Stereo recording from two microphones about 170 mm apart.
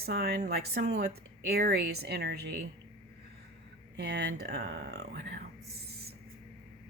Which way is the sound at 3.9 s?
85° right.